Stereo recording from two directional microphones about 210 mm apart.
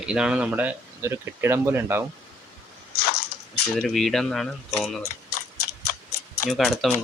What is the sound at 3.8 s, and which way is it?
Speech, centre (ahead or behind).